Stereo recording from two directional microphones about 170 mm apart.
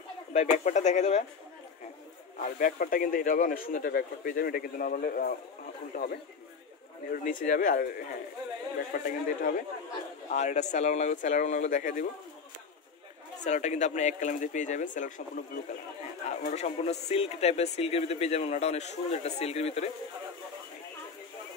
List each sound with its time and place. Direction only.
0.3 s speech: 45° left (ahead or behind)
2.4 s speech: 55° left (ahead or behind)
7.1 s speech: 55° left (ahead or behind)
10.3 s speech: 45° left (ahead or behind)
13.4 s speech: 40° left (ahead or behind)
16.3 s speech: 40° left (ahead or behind)